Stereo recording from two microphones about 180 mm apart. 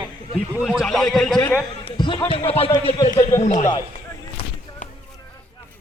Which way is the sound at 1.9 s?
25° left (ahead or behind).